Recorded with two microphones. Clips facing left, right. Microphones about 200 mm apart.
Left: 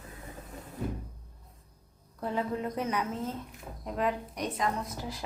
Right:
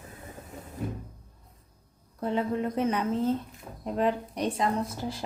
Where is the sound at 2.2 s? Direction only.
25° right (ahead or behind).